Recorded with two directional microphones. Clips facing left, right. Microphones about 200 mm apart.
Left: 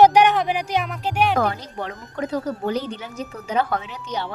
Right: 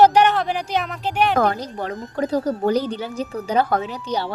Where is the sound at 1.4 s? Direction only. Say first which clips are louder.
Right 3 dB; 40° right (ahead or behind).